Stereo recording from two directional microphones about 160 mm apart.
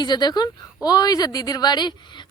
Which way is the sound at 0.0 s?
25° left (ahead or behind).